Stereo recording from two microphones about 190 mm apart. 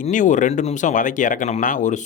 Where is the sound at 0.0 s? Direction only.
40° left (ahead or behind).